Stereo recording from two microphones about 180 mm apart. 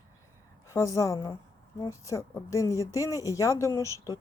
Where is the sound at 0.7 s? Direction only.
15° left (ahead or behind).